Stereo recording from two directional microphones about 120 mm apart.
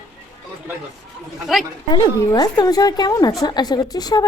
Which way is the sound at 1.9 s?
35° left (ahead or behind).